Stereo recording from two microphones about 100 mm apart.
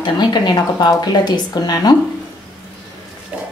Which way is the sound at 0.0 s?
45° left (ahead or behind).